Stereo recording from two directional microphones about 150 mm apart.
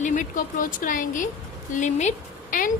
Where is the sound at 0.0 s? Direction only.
60° left (ahead or behind).